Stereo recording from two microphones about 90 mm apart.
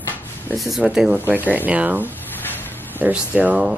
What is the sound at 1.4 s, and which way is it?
Speech, 20° right (ahead or behind).